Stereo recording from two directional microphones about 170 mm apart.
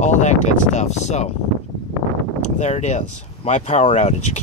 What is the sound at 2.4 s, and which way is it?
Speech, 40° left (ahead or behind).